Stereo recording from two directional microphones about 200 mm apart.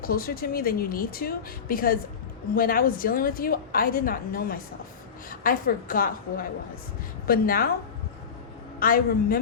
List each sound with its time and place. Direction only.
0.0 s a woman's voice: 50° left (ahead or behind)
8.8 s a woman's voice: 45° left (ahead or behind)